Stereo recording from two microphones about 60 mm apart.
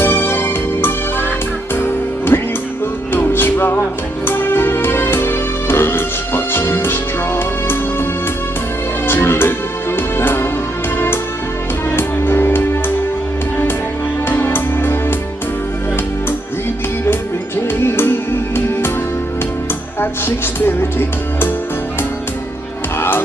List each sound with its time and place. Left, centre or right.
0.0 s music: left
11.9 s music: left
14.3 s music: left
17.8 s music: left
20.0 s music: left
22.9 s music: left